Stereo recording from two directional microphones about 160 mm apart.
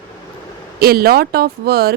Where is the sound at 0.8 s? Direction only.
70° right (ahead or behind).